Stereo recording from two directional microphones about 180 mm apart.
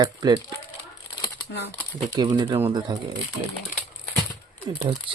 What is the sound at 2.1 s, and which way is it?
Speech, 25° right (ahead or behind).